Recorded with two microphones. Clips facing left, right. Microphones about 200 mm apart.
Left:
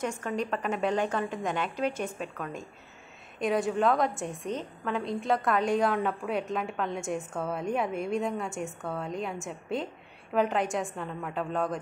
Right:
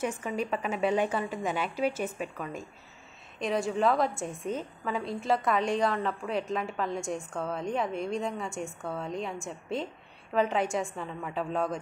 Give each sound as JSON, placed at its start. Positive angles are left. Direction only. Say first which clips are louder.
{"t": 0.0, "sound": "a woman's voice", "louder": "even", "side_deg": -5}